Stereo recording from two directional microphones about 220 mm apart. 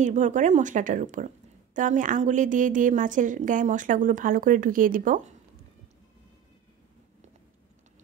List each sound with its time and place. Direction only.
0.0 s a woman's voice: 35° right (ahead or behind)